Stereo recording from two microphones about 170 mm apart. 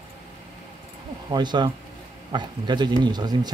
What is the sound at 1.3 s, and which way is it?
Speech, 25° right (ahead or behind).